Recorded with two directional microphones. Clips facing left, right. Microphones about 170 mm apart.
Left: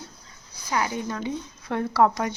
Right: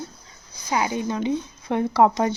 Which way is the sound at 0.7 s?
20° right (ahead or behind).